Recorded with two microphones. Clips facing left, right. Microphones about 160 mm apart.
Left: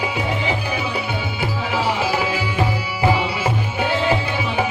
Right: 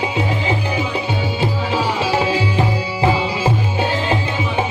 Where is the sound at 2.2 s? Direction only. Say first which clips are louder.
Right 3 dB; 30° right (ahead or behind).